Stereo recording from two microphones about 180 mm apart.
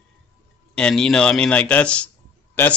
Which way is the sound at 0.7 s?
5° left (ahead or behind).